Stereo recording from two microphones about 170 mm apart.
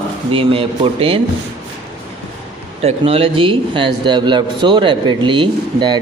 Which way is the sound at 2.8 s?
35° right (ahead or behind).